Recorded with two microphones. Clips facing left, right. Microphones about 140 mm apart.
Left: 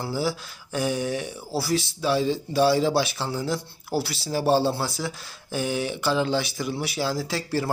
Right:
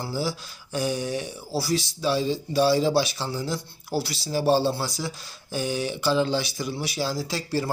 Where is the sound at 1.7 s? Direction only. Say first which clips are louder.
Left 1 dB; 25° right (ahead or behind).